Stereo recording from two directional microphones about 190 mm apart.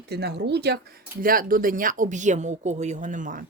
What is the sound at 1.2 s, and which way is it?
A woman's voice, 50° right (ahead or behind).